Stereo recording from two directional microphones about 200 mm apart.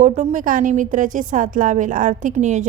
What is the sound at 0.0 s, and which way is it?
A woman's voice, 35° right (ahead or behind).